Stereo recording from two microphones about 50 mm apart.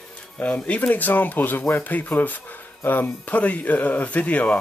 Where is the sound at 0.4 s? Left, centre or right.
Left.